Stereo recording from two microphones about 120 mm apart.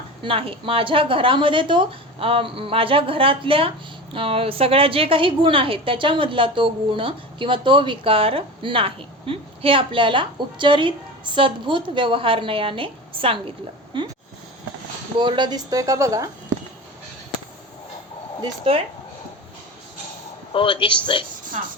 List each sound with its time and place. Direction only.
0.2 s a woman's voice: 50° right (ahead or behind)
15.2 s speech: 40° right (ahead or behind)
18.7 s a woman's voice: 50° right (ahead or behind)
20.5 s speech: 45° left (ahead or behind)